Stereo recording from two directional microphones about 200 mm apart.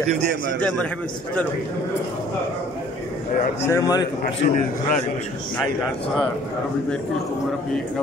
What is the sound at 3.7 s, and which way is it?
Speech, 20° left (ahead or behind).